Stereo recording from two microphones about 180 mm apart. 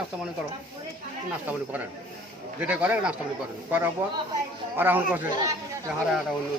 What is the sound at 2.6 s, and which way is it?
A man's voice, 10° right (ahead or behind).